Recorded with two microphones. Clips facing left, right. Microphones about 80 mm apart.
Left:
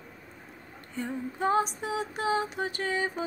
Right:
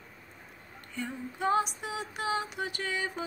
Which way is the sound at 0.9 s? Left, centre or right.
Left.